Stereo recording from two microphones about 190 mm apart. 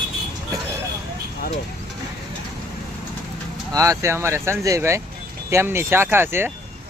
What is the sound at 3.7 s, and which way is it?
Speech, 15° right (ahead or behind).